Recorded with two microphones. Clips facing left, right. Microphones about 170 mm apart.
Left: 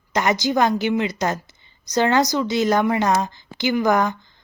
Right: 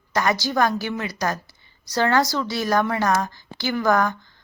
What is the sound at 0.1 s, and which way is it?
A woman's voice, 20° left (ahead or behind).